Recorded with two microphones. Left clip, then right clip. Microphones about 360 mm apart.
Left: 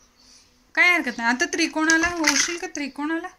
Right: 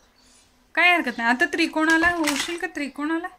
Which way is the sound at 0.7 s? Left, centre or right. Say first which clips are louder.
Even; centre.